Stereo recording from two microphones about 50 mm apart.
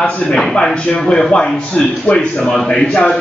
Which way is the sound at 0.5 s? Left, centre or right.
Centre.